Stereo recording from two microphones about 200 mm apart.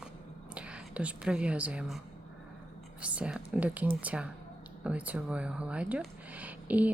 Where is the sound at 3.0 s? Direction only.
5° right (ahead or behind).